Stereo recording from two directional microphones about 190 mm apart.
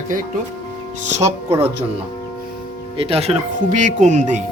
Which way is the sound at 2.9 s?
30° right (ahead or behind).